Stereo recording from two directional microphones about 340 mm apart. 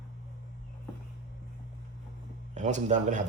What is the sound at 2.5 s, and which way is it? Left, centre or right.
Speech, right.